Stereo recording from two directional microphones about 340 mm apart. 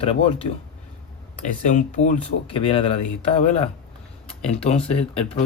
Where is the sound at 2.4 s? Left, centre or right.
Centre.